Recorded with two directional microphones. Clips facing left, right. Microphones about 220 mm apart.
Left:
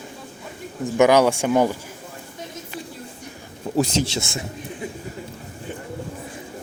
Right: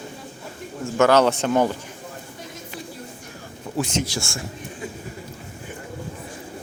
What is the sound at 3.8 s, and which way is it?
Speech, 35° left (ahead or behind).